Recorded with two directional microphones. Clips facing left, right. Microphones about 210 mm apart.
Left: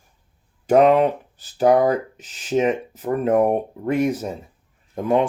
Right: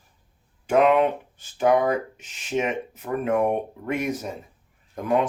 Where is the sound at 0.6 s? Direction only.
35° left (ahead or behind).